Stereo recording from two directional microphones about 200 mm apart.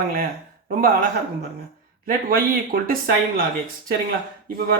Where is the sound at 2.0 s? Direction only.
45° right (ahead or behind).